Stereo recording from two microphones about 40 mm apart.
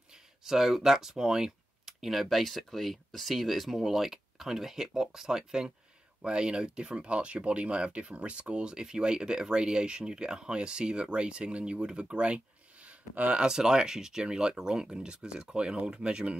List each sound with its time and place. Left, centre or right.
0.5 s speech: centre
6.2 s speech: right
13.1 s speech: right
13.4 s speech: centre